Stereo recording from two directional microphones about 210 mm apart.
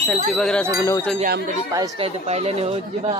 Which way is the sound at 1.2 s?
40° right (ahead or behind).